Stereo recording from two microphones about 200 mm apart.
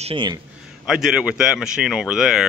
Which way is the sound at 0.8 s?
5° right (ahead or behind).